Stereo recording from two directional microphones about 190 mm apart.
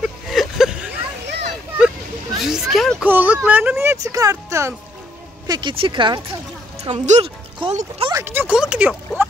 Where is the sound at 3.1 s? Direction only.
10° right (ahead or behind); by 8.2 s 25° right (ahead or behind).